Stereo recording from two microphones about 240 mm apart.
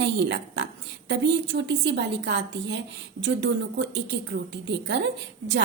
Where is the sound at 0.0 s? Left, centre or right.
Right.